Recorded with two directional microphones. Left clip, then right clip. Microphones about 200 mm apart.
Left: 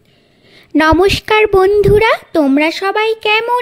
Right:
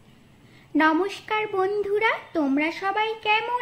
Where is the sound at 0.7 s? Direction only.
55° left (ahead or behind).